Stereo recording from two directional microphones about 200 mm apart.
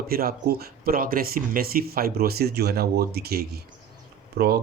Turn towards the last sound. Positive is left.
turn(degrees=-50)  # may be behind; listen again after turning